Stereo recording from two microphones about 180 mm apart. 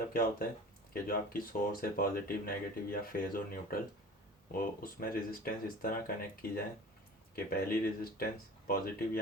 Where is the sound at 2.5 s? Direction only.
55° left (ahead or behind).